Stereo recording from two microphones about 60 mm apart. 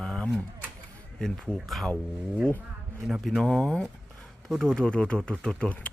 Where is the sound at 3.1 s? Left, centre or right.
Centre.